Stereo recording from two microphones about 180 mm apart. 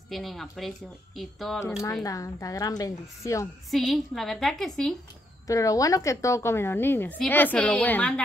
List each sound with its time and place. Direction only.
0.1 s a woman's voice: centre (ahead or behind)
2.0 s a woman's voice: 20° left (ahead or behind)
3.7 s a woman's voice: centre (ahead or behind)
5.5 s a woman's voice: 20° left (ahead or behind)